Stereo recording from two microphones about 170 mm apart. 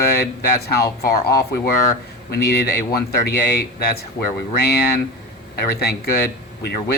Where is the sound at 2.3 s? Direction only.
65° left (ahead or behind).